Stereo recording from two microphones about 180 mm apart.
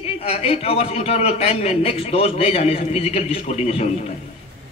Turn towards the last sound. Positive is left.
turn(degrees=40)  # may be behind; listen again after turning